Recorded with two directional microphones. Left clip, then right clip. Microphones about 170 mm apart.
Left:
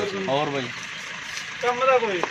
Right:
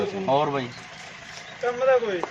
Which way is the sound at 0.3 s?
Centre (ahead or behind).